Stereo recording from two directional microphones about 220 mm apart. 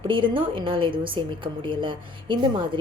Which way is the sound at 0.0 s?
20° right (ahead or behind).